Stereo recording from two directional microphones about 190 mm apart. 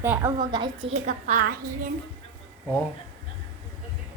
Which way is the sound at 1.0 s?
45° right (ahead or behind).